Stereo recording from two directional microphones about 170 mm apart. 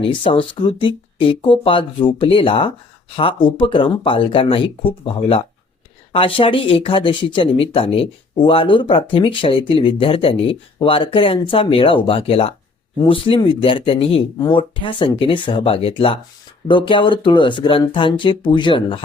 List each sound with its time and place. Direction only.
0.0 s speech: 30° left (ahead or behind)